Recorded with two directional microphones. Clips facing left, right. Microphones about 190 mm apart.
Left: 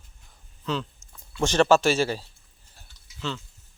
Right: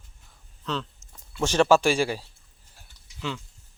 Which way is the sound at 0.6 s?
5° left (ahead or behind).